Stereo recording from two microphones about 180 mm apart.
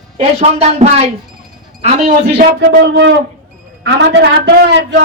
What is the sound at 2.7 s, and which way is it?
A woman's voice, 80° right.